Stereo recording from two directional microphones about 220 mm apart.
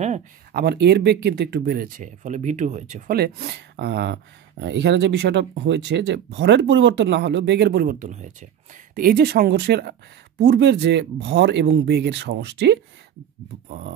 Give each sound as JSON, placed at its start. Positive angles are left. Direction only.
{"t": 0.5, "sound": "speech", "side_deg": -45}